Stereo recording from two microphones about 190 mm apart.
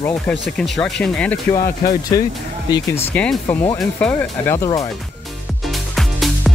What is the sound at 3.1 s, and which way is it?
Speech, 5° left (ahead or behind).